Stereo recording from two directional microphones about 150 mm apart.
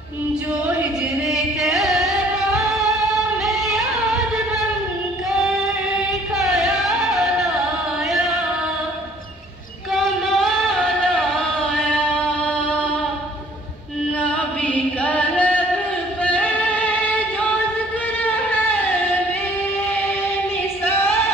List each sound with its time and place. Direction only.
0.7 s music: 5° right (ahead or behind)
5.9 s music: 5° right (ahead or behind)
9.9 s music: 5° left (ahead or behind)
14.2 s chant: 10° left (ahead or behind)
16.2 s music: 10° left (ahead or behind)
20.8 s female singing: 15° left (ahead or behind)